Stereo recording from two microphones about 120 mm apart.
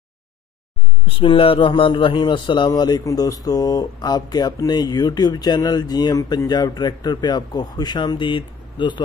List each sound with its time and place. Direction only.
1.0 s a man's voice: 45° left (ahead or behind)